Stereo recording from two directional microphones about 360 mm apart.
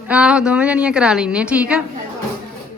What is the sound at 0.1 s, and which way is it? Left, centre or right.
A woman's voice, centre.